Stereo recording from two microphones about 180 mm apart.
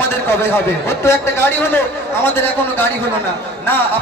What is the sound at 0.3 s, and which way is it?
A man's voice, 15° left (ahead or behind).